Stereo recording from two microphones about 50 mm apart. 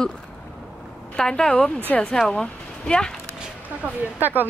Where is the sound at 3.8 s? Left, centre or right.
Right.